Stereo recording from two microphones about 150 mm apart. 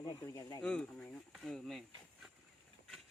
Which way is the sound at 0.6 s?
5° left (ahead or behind).